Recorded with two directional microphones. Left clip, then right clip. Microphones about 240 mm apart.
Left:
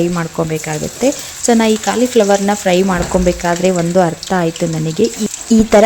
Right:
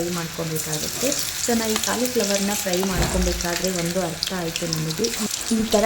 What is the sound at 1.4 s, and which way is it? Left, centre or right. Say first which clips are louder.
Speech: left 11 dB; left.